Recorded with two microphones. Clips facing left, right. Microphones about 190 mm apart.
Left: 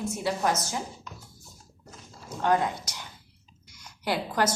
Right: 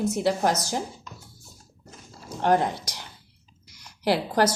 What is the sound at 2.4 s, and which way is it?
Speech, 35° right (ahead or behind).